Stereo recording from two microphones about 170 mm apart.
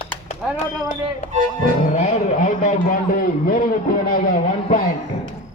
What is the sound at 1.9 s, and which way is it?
A man's voice, 45° left (ahead or behind).